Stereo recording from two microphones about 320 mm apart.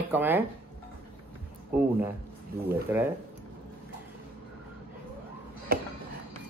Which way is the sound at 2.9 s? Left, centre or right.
Centre.